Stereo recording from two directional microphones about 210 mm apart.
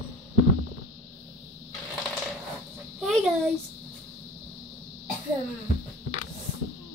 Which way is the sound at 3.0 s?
Centre (ahead or behind).